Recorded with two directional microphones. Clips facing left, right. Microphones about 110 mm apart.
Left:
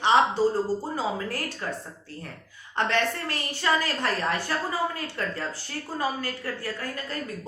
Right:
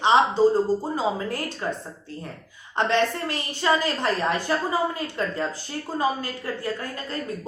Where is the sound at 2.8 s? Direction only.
20° right (ahead or behind).